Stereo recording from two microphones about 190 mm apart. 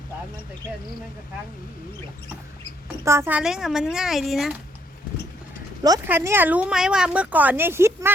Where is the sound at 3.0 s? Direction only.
15° right (ahead or behind).